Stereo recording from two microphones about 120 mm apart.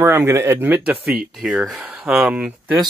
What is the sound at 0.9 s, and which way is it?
Speech, 5° right (ahead or behind).